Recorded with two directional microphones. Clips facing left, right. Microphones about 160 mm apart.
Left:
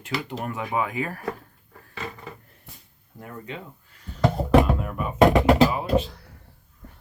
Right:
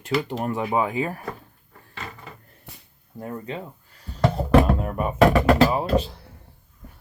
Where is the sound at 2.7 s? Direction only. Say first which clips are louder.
Right 3 dB; 70° right (ahead or behind).